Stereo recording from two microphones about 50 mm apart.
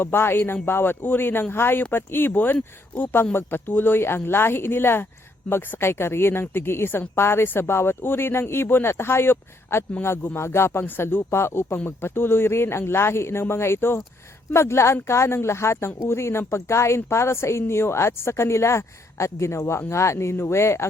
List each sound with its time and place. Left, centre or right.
0.0 s a man's voice: left
14.5 s a woman's voice: left